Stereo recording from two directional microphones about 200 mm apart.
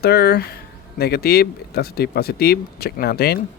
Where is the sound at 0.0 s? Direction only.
50° left (ahead or behind).